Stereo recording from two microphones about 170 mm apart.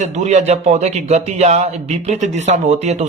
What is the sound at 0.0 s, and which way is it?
A man's voice, 45° right (ahead or behind).